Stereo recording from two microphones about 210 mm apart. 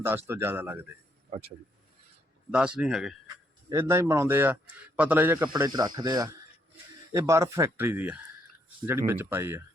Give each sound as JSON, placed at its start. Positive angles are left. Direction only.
{"t": 0.0, "sound": "a man's voice", "side_deg": -10}
{"t": 1.3, "sound": "speech", "side_deg": -30}
{"t": 2.5, "sound": "speech", "side_deg": -5}
{"t": 3.7, "sound": "a man's voice", "side_deg": -15}